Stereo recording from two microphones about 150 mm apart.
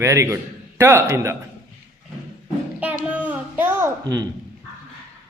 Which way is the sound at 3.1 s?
10° right (ahead or behind).